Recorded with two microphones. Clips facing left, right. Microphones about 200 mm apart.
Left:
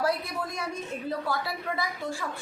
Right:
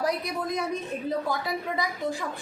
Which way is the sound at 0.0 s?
15° right (ahead or behind).